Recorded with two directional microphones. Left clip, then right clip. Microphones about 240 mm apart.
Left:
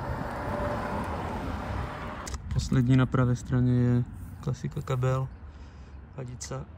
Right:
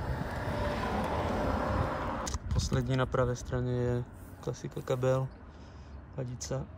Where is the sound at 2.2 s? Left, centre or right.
Centre.